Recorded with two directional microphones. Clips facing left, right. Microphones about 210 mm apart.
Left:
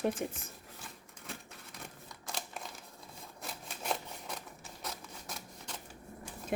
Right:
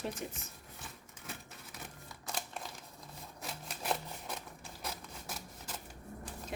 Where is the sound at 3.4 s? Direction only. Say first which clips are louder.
Even; centre (ahead or behind).